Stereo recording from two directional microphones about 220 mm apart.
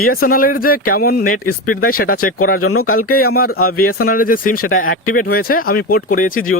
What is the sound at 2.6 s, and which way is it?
Speech, 75° left (ahead or behind).